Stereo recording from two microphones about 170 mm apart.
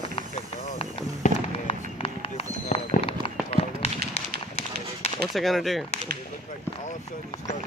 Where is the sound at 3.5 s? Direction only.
35° left (ahead or behind).